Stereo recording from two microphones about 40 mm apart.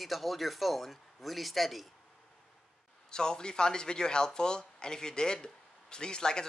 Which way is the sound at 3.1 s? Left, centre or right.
Centre.